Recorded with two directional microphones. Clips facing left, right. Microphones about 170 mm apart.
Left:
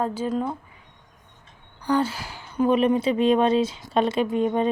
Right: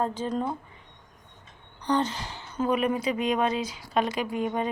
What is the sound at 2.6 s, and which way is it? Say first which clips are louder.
Speech: left 6 dB; 25° left (ahead or behind).